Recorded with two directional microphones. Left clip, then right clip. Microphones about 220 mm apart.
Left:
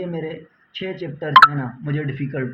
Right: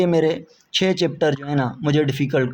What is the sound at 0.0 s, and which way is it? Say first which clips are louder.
Speech: right 10 dB; 45° right (ahead or behind).